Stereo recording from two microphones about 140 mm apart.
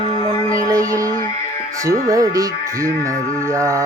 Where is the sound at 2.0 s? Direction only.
25° right (ahead or behind).